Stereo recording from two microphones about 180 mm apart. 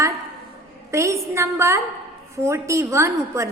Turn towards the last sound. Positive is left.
turn(degrees=-15)  # may be behind; listen again after turning